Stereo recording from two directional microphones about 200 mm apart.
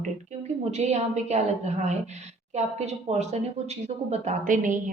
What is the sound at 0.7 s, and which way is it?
A woman's voice, 35° right (ahead or behind).